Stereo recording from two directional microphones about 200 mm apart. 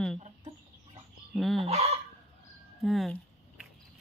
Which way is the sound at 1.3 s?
Centre (ahead or behind).